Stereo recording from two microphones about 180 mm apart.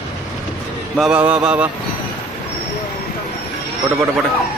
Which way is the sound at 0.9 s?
5° right (ahead or behind).